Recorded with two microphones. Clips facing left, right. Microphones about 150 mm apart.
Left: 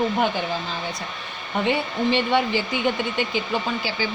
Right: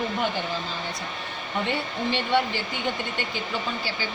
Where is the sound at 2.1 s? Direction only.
90° left.